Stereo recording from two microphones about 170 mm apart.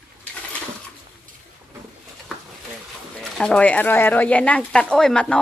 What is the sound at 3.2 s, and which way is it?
Speech, 5° left (ahead or behind).